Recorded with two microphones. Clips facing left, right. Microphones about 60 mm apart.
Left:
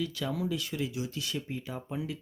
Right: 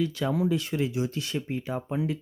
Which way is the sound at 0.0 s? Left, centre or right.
Right.